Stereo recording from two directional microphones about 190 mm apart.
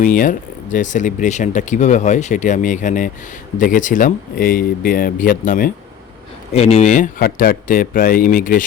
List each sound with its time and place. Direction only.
0.0 s speech: 45° left (ahead or behind)
6.5 s speech: 35° left (ahead or behind)